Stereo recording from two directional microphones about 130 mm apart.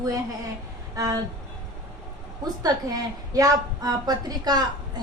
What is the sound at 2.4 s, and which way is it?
A woman's voice, 30° right (ahead or behind).